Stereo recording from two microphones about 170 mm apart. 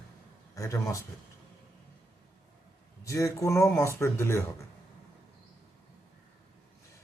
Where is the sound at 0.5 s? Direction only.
20° left (ahead or behind).